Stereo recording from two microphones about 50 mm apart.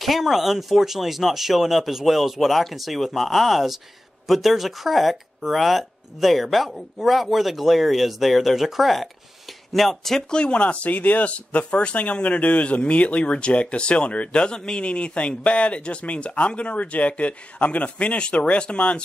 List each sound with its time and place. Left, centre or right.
0.0 s speech: centre
10.3 s speech: left